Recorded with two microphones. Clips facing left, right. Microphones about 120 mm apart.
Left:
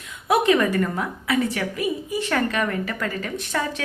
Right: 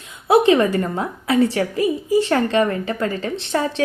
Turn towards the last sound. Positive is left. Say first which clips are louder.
# right 5 dB
turn(degrees=-30)  # may be behind; listen again after turning